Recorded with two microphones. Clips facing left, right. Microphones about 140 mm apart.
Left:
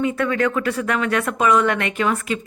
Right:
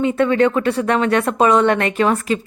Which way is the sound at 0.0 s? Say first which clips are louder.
Right 5 dB; 25° right (ahead or behind).